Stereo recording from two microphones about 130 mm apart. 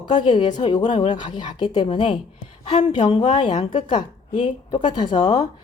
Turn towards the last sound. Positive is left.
turn(degrees=35)  # may be behind; listen again after turning